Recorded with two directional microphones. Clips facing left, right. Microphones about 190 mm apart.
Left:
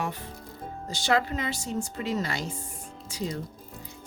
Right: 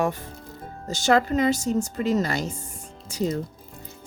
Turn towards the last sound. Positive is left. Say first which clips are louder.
# right 7 dB
turn(degrees=-45)  # may be behind; listen again after turning